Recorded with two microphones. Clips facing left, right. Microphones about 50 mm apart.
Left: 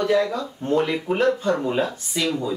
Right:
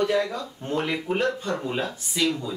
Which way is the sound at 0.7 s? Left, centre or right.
Centre.